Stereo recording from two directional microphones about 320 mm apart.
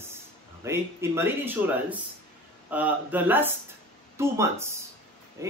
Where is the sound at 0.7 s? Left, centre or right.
Centre.